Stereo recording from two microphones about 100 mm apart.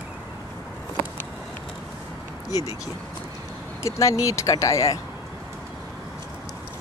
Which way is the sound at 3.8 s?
30° left (ahead or behind).